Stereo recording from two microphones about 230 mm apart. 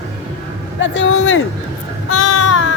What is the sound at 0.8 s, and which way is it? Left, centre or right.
Speech, left.